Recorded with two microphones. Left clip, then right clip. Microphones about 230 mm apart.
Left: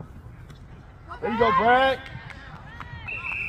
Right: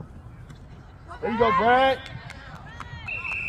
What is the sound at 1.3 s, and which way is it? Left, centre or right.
Speech, centre.